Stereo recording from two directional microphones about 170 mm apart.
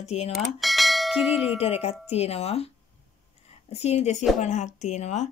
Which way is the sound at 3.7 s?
40° left (ahead or behind).